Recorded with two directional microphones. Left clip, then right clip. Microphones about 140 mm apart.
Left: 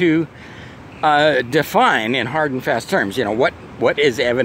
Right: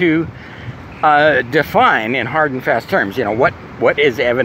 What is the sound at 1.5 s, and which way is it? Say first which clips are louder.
Speech: right 3 dB; 45° left (ahead or behind).